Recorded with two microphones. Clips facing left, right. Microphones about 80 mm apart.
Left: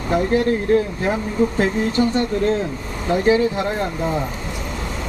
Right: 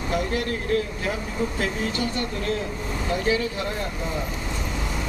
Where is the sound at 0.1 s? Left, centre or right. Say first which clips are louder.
Left 9 dB; left.